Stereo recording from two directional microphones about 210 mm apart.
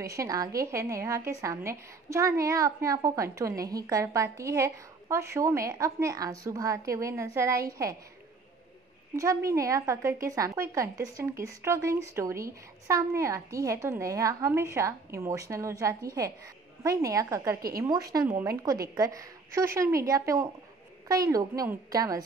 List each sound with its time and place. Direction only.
0.0 s a woman's voice: 15° right (ahead or behind)
9.1 s a woman's voice: 15° right (ahead or behind)
17.6 s a woman's voice: 45° right (ahead or behind)
17.8 s a woman's voice: 15° right (ahead or behind)